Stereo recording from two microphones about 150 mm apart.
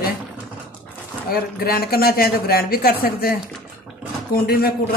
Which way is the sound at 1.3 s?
90° left.